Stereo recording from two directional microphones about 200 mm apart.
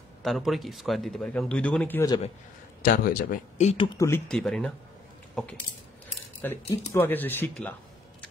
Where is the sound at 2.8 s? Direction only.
45° left (ahead or behind).